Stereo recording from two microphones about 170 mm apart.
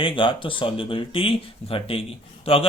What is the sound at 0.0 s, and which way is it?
Speech, 30° left (ahead or behind).